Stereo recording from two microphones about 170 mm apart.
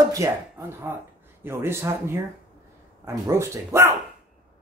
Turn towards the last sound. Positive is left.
turn(degrees=-15)  # may be behind; listen again after turning